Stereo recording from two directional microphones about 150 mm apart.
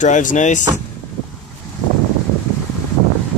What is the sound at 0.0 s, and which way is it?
Speech, 55° left (ahead or behind).